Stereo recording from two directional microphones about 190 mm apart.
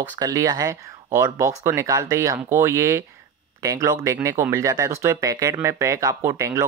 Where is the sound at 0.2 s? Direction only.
20° right (ahead or behind).